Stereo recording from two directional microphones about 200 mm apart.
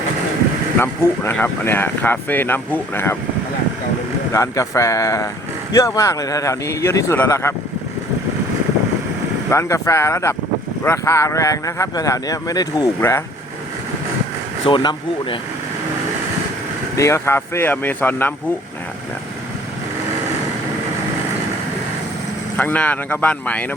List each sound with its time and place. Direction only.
0.8 s speech: 10° left (ahead or behind)
4.3 s speech: 15° left (ahead or behind)
9.5 s speech: 15° left (ahead or behind)
14.6 s speech: 25° left (ahead or behind)
17.0 s speech: 15° left (ahead or behind)
22.5 s speech: 5° left (ahead or behind)